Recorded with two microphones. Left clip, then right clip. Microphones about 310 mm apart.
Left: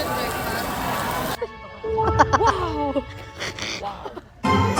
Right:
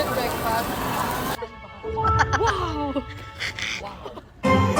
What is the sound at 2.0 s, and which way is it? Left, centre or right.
Music, left.